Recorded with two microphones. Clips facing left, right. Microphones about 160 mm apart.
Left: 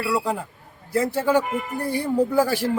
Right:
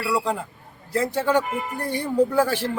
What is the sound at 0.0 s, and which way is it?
A man's voice, 10° left (ahead or behind).